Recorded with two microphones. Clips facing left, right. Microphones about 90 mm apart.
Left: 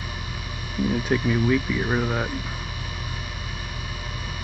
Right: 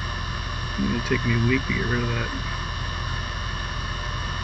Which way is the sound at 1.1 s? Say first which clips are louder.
Left 2 dB; 20° left (ahead or behind).